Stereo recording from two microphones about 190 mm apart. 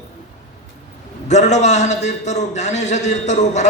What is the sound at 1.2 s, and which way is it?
A man's voice, 40° left (ahead or behind).